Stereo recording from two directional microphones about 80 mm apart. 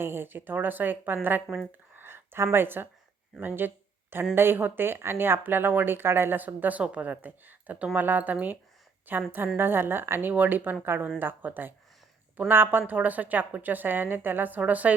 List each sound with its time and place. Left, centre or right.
0.0 s speech: right